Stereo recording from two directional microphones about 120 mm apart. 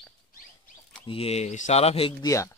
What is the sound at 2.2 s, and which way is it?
Speech, 25° left (ahead or behind).